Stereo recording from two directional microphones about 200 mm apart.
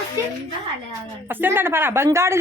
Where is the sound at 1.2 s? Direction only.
10° right (ahead or behind).